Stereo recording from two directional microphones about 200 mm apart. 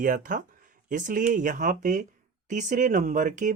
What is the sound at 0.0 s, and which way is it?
Speech, 45° right (ahead or behind).